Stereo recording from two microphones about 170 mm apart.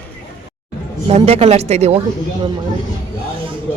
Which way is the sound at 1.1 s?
35° right (ahead or behind).